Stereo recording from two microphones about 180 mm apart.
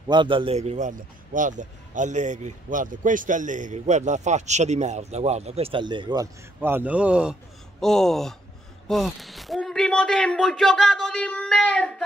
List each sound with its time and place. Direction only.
0.1 s a man's voice: 25° right (ahead or behind)
6.6 s a man's voice: 10° right (ahead or behind); by 12.0 s 5° left (ahead or behind)